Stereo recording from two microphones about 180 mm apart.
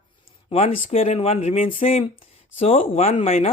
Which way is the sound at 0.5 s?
35° left (ahead or behind).